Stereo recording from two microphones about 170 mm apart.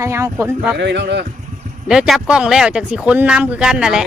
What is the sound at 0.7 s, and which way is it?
Speech, 90° right.